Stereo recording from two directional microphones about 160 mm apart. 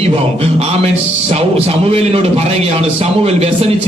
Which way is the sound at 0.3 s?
40° right (ahead or behind).